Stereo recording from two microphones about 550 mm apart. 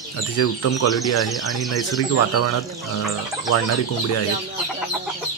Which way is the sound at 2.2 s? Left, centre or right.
Left.